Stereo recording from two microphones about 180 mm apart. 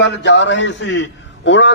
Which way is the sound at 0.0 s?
80° left.